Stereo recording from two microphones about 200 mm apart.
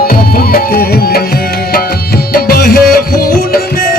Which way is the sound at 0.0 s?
50° left (ahead or behind).